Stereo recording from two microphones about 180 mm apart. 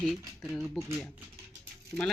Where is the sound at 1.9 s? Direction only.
10° left (ahead or behind).